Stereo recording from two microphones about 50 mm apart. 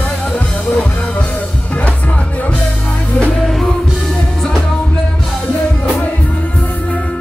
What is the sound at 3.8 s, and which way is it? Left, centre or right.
Music, centre.